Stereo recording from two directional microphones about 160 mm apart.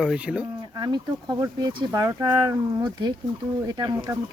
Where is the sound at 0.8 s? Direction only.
25° right (ahead or behind).